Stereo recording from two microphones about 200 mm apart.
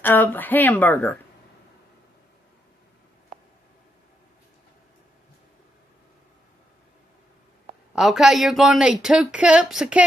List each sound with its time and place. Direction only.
0.0 s a woman's voice: 10° left (ahead or behind)
7.9 s speech: centre (ahead or behind)